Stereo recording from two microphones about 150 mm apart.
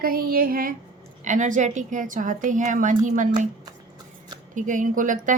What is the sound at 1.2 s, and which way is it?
A woman's voice, 55° right (ahead or behind).